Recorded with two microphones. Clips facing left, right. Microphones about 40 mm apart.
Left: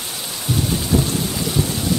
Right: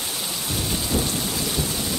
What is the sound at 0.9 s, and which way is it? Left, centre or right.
Thunder, left.